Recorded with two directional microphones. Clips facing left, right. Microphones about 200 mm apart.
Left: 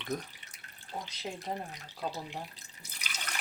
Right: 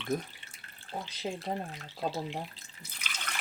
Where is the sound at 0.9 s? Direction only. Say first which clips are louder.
Right 2 dB; 15° right (ahead or behind).